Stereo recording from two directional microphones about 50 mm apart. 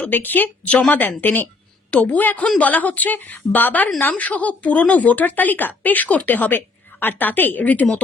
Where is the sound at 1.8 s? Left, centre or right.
Left.